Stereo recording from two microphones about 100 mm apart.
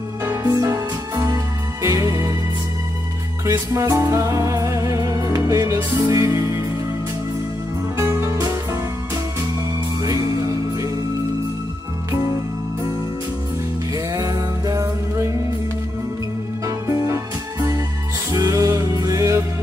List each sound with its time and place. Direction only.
0.2 s music: 25° right (ahead or behind)
0.5 s music: 40° right (ahead or behind)
3.4 s music: 35° right (ahead or behind)
8.0 s music: 30° right (ahead or behind)
9.9 s music: 35° right (ahead or behind)
13.9 s music: 40° right (ahead or behind)
16.6 s music: 30° right (ahead or behind)